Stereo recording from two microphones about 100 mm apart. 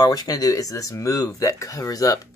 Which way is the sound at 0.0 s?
40° left (ahead or behind).